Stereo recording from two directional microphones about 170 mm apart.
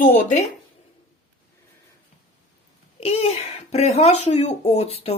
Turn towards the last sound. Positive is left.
turn(degrees=40)  # may be behind; listen again after turning